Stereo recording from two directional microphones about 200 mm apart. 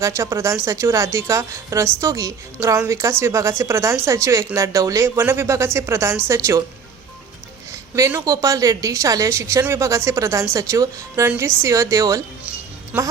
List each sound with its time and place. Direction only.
0.0 s a woman's voice: 15° right (ahead or behind)
7.9 s a woman's voice: 15° right (ahead or behind)
12.5 s music: 10° right (ahead or behind)